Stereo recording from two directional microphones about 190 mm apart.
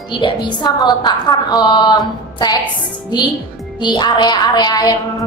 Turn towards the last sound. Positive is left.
turn(degrees=20)  # may be behind; listen again after turning